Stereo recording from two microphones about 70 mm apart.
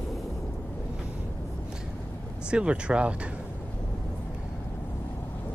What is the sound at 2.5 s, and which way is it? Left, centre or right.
Speech, centre.